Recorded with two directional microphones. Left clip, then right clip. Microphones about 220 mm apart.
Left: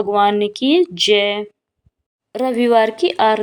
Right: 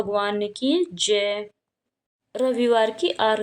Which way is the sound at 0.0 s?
30° left (ahead or behind).